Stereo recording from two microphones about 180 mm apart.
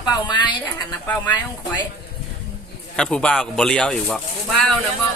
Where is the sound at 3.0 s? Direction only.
5° left (ahead or behind).